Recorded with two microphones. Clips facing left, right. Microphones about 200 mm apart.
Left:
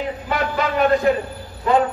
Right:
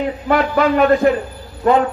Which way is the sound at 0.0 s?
50° right (ahead or behind).